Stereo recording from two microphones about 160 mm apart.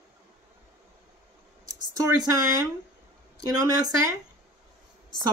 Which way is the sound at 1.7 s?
20° right (ahead or behind).